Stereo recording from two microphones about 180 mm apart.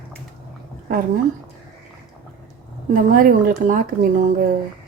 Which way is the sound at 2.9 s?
50° right (ahead or behind).